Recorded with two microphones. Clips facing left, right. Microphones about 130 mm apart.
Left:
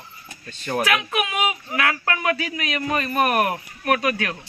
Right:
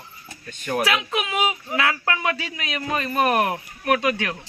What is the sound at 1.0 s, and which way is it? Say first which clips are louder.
Speech: even; 25° right (ahead or behind).